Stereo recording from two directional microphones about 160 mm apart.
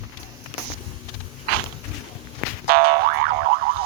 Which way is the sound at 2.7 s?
70° right (ahead or behind).